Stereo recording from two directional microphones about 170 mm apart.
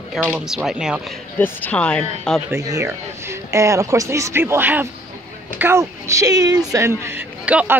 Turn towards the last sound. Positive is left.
turn(degrees=-10)  # may be behind; listen again after turning